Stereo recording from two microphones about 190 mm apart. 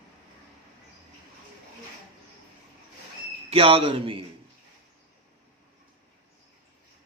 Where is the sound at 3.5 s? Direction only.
30° right (ahead or behind).